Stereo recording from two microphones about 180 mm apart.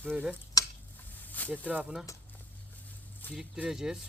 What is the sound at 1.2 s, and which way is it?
Snake, 10° left (ahead or behind).